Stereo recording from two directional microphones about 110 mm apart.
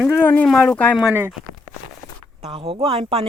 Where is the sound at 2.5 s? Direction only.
55° right (ahead or behind).